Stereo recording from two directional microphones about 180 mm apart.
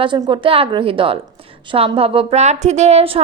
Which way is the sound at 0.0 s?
25° right (ahead or behind).